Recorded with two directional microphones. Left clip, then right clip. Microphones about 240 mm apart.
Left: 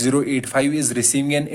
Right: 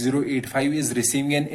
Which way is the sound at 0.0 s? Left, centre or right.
Left.